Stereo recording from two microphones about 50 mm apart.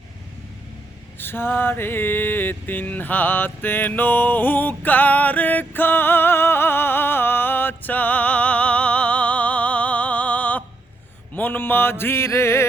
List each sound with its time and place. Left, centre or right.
1.2 s mantra: left
11.3 s mantra: left